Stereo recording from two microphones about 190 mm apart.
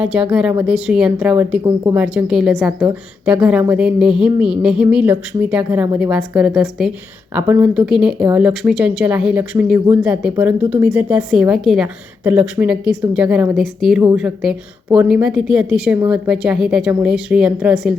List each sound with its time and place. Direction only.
0.0 s a woman's voice: 5° right (ahead or behind)
1.6 s speech: 15° right (ahead or behind)
2.1 s a woman's voice: 5° right (ahead or behind)